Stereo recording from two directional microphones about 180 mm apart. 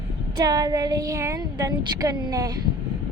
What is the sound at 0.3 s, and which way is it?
A woman's voice, 20° right (ahead or behind).